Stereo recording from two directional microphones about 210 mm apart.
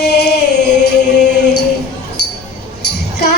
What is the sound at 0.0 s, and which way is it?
Music, 50° left (ahead or behind).